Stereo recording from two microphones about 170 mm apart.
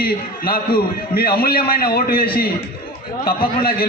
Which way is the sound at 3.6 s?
65° left (ahead or behind).